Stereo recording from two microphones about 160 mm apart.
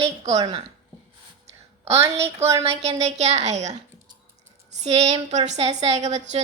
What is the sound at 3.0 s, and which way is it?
Speech, 45° right (ahead or behind).